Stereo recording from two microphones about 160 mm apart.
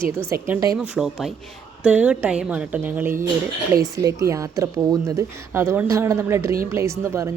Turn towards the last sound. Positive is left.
turn(degrees=-15)  # may be behind; listen again after turning